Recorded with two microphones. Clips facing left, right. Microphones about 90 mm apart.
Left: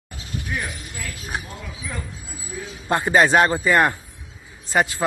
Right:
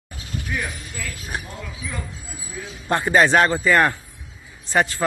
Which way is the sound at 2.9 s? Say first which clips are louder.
Even; 20° left (ahead or behind).